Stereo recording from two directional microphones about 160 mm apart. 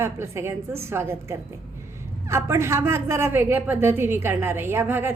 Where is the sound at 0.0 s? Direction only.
15° right (ahead or behind).